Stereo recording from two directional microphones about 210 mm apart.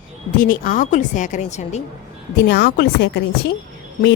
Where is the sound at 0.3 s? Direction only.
40° left (ahead or behind).